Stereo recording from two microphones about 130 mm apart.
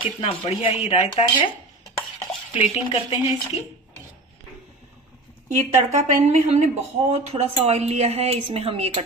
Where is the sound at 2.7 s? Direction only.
45° left (ahead or behind).